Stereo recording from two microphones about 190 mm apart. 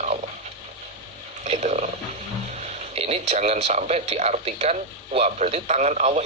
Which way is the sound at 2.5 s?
35° right (ahead or behind).